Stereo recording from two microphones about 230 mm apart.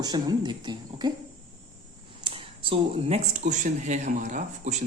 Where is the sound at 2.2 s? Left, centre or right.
Right.